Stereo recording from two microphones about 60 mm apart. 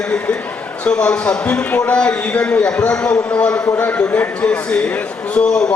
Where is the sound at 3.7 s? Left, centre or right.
Left.